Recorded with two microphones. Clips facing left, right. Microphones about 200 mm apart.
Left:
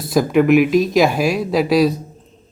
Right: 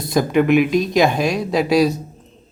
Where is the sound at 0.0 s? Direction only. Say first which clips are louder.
Left 2 dB; centre (ahead or behind).